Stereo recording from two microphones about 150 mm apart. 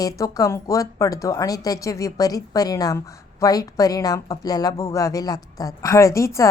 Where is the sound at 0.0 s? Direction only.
20° left (ahead or behind).